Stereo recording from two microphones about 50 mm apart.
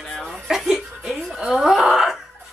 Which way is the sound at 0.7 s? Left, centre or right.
Centre.